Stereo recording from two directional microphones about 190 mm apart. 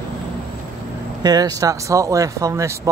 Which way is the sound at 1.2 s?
20° right (ahead or behind).